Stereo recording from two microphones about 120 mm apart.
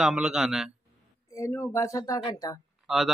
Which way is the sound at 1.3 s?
20° left (ahead or behind).